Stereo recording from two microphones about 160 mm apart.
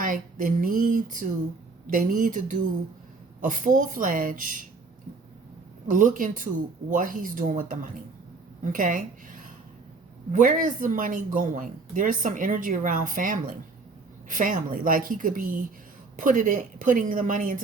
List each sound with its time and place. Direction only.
0.0 s a woman's voice: 55° right (ahead or behind)
5.9 s a woman's voice: 55° right (ahead or behind)